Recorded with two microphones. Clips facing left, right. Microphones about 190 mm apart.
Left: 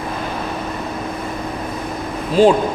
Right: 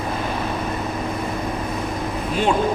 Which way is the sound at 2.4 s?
30° left (ahead or behind).